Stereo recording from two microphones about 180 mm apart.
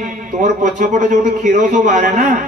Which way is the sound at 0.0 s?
45° right (ahead or behind).